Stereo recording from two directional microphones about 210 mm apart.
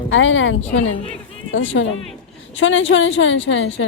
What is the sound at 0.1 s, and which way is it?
A woman's voice, 65° left (ahead or behind).